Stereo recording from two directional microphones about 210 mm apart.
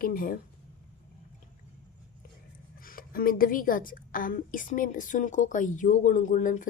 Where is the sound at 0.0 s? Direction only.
40° left (ahead or behind).